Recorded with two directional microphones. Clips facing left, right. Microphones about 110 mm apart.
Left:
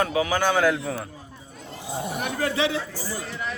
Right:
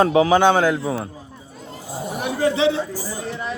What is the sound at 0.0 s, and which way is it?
A woman's voice, 30° right (ahead or behind).